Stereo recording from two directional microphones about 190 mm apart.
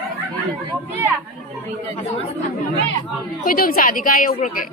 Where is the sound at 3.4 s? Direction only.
50° left (ahead or behind).